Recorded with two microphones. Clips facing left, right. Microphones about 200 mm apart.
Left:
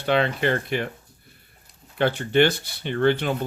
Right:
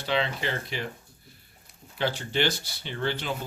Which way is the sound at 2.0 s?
55° left (ahead or behind).